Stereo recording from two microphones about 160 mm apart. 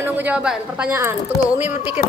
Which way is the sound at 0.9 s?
15° right (ahead or behind).